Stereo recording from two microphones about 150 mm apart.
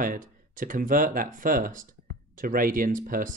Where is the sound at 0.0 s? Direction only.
65° right (ahead or behind).